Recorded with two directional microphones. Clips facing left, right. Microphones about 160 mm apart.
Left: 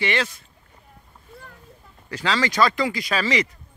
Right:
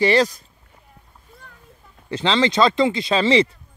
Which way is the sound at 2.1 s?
25° right (ahead or behind).